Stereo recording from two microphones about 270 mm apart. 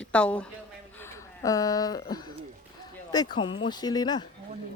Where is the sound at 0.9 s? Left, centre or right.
Centre.